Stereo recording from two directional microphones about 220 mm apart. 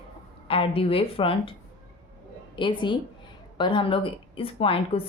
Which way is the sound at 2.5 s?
20° left (ahead or behind).